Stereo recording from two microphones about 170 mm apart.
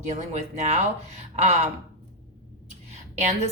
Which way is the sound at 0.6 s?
45° right (ahead or behind).